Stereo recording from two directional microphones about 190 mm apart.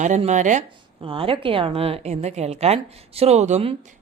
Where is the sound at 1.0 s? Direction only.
30° right (ahead or behind).